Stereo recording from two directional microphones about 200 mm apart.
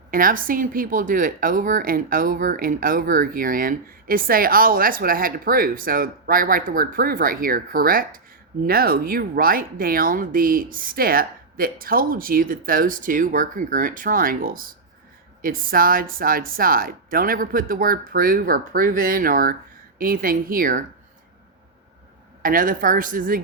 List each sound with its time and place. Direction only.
0.1 s speech: 45° right (ahead or behind)
22.4 s speech: 45° right (ahead or behind)